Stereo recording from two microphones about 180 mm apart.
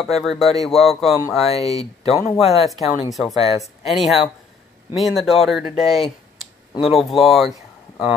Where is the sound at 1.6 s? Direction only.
20° right (ahead or behind).